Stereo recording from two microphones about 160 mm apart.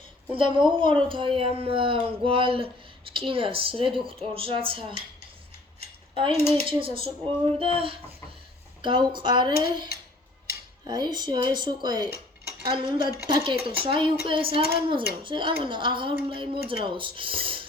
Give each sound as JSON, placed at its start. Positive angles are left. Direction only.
{"t": 0.3, "sound": "a woman's voice", "side_deg": -30}
{"t": 6.1, "sound": "a woman's voice", "side_deg": -35}